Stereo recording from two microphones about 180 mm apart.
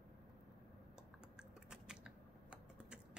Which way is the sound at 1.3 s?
5° right (ahead or behind).